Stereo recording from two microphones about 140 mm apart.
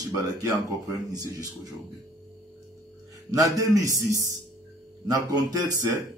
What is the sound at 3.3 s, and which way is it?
Speech, 25° right (ahead or behind).